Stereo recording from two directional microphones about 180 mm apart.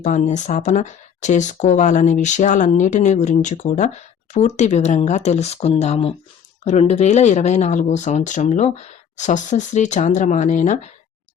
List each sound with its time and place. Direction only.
0.0 s speech: 40° left (ahead or behind)